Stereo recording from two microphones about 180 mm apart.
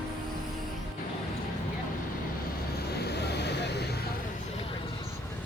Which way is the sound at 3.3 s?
70° left (ahead or behind).